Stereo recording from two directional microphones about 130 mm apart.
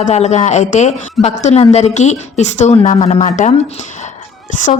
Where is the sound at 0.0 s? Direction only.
60° left (ahead or behind).